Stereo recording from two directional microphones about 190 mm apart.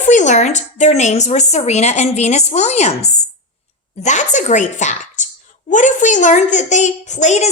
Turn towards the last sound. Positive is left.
turn(degrees=35)  # may be behind; listen again after turning